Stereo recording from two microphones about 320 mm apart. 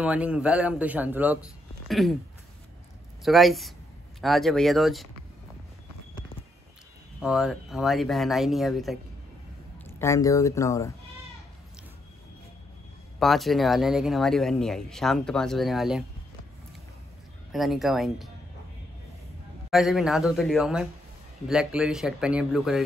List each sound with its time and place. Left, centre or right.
0.0 s speech: centre
3.3 s speech: centre
7.2 s speech: centre
13.2 s speech: centre
17.5 s speech: centre
19.7 s speech: centre